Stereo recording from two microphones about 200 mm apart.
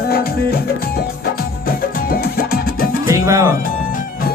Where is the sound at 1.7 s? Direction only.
50° left (ahead or behind).